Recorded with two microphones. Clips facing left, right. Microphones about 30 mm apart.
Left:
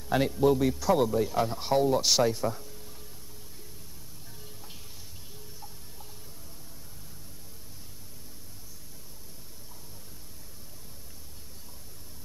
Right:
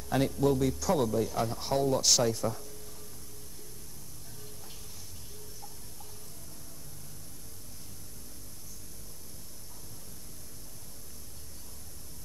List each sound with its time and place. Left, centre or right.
0.0 s speech: centre